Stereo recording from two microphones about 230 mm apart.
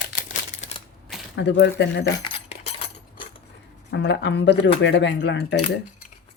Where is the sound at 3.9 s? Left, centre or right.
Left.